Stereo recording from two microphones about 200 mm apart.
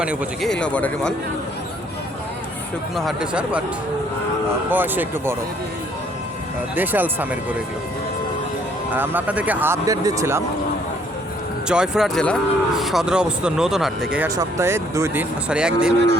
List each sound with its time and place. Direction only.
0.0 s speech: 5° right (ahead or behind)
0.6 s speech: 5° left (ahead or behind)
2.9 s speech: centre (ahead or behind)
4.7 s speech: 10° right (ahead or behind)
6.7 s speech: 10° right (ahead or behind)
8.9 s speech: 10° right (ahead or behind)
11.7 s speech: 5° right (ahead or behind)
14.3 s speech: 15° right (ahead or behind)